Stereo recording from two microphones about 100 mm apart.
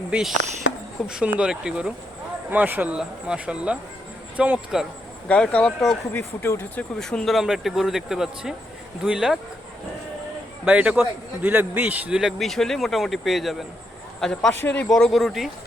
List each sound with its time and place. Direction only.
0.1 s a man's voice: 5° right (ahead or behind)
5.3 s speech: 10° left (ahead or behind)
6.1 s speech: 20° left (ahead or behind)
7.0 s a man's voice: 5° left (ahead or behind)
10.7 s a man's voice: 10° right (ahead or behind)